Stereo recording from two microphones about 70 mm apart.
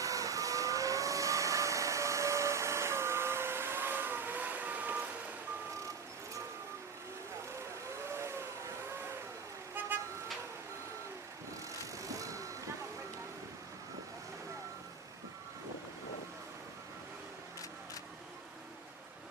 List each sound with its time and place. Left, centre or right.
0.0 s vehicle: right
8.0 s vehicle: right
9.8 s vehicle: right
12.0 s vehicle: right